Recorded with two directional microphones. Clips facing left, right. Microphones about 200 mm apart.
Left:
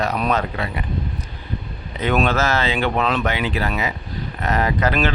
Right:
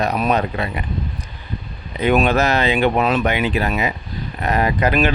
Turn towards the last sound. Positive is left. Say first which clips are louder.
# right 2 dB
turn(degrees=-15)  # may be behind; listen again after turning